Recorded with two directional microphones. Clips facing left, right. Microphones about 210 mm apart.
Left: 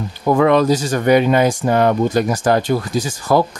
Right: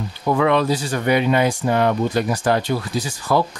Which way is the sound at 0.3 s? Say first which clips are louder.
Left 4 dB; 45° left (ahead or behind).